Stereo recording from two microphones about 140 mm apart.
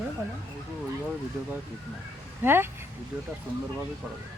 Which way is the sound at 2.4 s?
15° right (ahead or behind).